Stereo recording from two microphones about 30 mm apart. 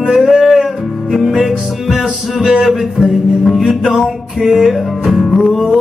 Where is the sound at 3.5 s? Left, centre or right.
Centre.